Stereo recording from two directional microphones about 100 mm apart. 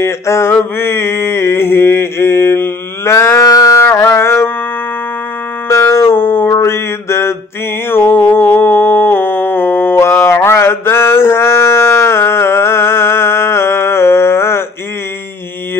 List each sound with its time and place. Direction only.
0.0 s mantra: 25° left (ahead or behind)
5.7 s mantra: 30° left (ahead or behind)
7.9 s a sound: 20° left (ahead or behind)
10.2 s mantra: 25° left (ahead or behind)